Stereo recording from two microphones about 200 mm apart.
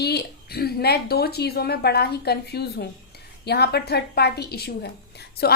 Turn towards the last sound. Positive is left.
turn(degrees=55)  # may be behind; listen again after turning